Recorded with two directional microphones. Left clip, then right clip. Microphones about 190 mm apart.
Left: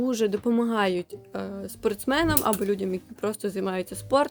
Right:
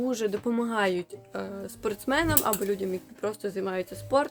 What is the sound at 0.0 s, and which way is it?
Speech, 35° left (ahead or behind).